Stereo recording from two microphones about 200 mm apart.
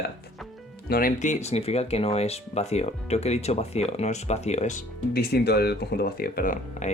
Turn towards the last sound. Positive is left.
turn(degrees=40)  # may be behind; listen again after turning